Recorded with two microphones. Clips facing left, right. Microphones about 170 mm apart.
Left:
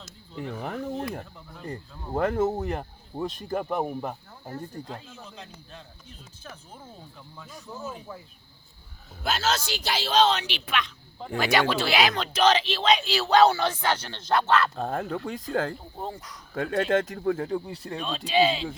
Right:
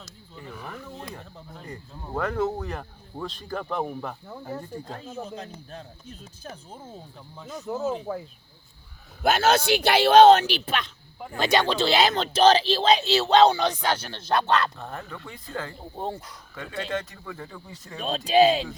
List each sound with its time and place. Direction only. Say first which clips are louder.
0.6 s a sound: left 8 dB; 60° left (ahead or behind)
1.6 s speech: left 4 dB; 30° left (ahead or behind); by 4.2 s 15° left (ahead or behind)
4.9 s speech: right 5 dB; 45° right (ahead or behind)
7.3 s speech: right 8 dB; 20° right (ahead or behind)
9.2 s a man's voice: right 7 dB; 55° right (ahead or behind); by 10.8 s 35° right (ahead or behind)
11.3 s speech: right 1 dB; 20° right (ahead or behind)
14.9 s speech: left 8 dB; 45° left (ahead or behind)
16.0 s speech: right 4 dB; 25° right (ahead or behind)
16.6 s speech: left 7 dB; 50° left (ahead or behind)
18.0 s speech: right 5 dB; 45° right (ahead or behind)